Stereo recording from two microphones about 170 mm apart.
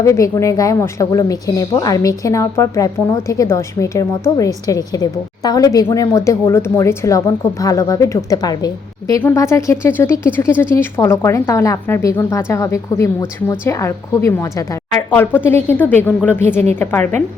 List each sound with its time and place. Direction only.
0.0 s a woman's voice: 20° left (ahead or behind)